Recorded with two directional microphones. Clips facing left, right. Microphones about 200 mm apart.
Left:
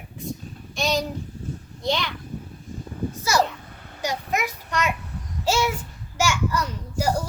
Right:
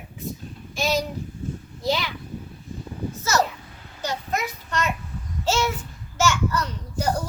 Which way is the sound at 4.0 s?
15° left (ahead or behind).